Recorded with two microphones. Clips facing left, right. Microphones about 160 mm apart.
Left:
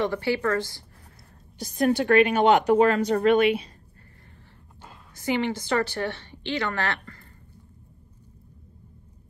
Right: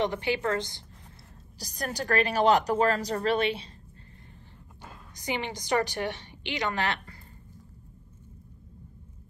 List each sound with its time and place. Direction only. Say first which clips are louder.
0.0 s a woman's voice: left 3 dB; 20° right (ahead or behind)
1.6 s a woman's voice: left 11 dB; 40° right (ahead or behind)
5.1 s a woman's voice: left 7 dB; 15° right (ahead or behind)